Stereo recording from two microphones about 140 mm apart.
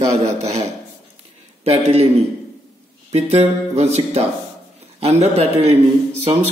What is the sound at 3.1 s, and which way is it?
A man's voice, 50° right (ahead or behind).